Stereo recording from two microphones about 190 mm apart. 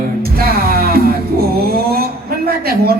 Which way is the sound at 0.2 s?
55° right (ahead or behind).